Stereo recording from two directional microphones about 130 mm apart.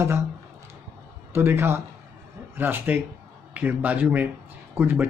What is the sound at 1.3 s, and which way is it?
A man's voice, 20° right (ahead or behind).